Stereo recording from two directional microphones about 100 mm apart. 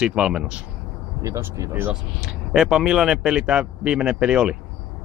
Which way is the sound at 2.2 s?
5° right (ahead or behind).